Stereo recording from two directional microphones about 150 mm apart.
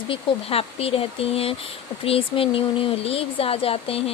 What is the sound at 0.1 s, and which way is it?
Speech, 40° left (ahead or behind).